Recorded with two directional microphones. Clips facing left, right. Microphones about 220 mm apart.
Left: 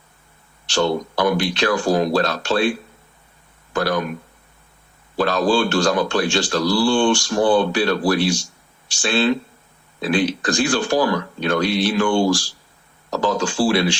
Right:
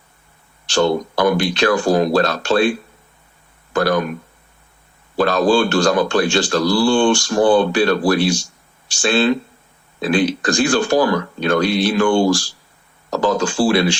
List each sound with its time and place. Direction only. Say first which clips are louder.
0.7 s speech: right 3 dB; 50° right (ahead or behind)
5.1 s speech: right 3 dB; 50° right (ahead or behind)